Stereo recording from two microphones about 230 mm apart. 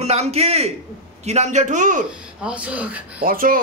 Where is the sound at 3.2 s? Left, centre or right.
Right.